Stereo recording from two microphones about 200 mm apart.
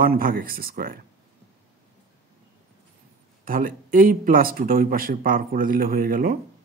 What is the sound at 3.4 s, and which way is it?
Speech, 45° right (ahead or behind).